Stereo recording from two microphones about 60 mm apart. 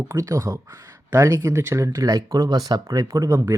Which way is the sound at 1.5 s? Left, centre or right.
Right.